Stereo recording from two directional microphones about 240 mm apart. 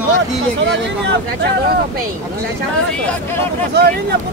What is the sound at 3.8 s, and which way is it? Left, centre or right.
Speech, right.